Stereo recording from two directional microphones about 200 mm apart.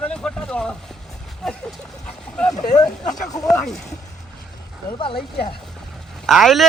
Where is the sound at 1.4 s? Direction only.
Centre (ahead or behind).